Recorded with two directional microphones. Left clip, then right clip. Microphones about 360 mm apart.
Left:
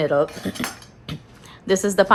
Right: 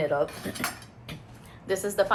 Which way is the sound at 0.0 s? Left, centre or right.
Left.